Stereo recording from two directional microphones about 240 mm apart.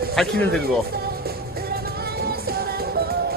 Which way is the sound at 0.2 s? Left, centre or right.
Centre.